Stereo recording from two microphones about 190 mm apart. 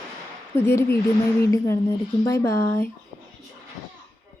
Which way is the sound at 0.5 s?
15° left (ahead or behind).